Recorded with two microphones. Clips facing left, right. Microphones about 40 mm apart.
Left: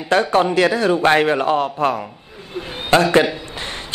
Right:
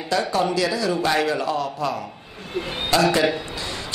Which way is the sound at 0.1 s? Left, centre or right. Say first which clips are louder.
Left 6 dB; left.